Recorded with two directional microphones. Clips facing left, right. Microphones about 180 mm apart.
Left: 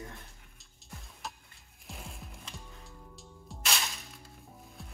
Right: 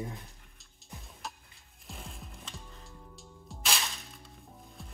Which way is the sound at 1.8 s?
Centre (ahead or behind).